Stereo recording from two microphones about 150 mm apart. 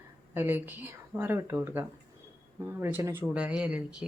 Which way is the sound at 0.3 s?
15° right (ahead or behind).